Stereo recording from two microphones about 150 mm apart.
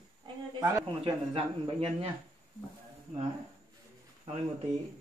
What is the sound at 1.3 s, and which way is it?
Speech, 40° right (ahead or behind).